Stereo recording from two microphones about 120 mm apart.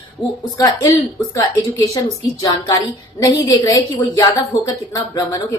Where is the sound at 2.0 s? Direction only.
35° left (ahead or behind).